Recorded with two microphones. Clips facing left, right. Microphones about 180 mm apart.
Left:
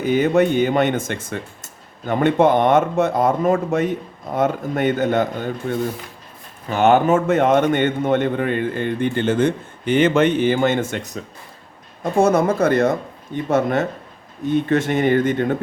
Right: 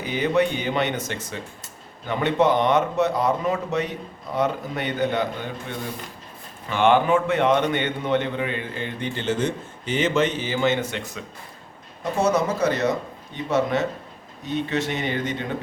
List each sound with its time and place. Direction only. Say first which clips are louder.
0.0 s speech: left 6 dB; 50° left (ahead or behind)
12.2 s speech: left 5 dB; 55° left (ahead or behind)